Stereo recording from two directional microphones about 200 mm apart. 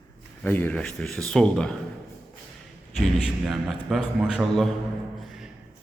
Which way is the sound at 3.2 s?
Centre (ahead or behind).